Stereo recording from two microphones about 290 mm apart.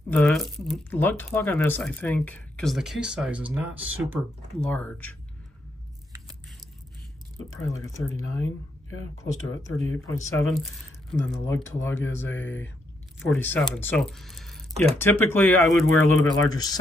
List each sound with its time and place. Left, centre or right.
0.1 s speech: centre
7.6 s speech: centre
9.8 s speech: centre